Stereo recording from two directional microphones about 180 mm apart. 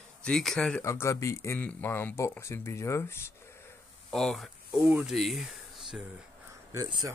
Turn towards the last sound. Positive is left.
turn(degrees=-20)  # may be behind; listen again after turning